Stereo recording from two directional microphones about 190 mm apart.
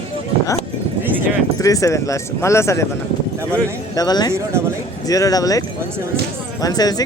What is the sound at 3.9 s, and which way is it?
Speech, 20° left (ahead or behind).